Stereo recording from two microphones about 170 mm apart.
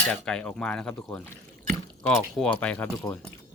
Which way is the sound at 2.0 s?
5° left (ahead or behind).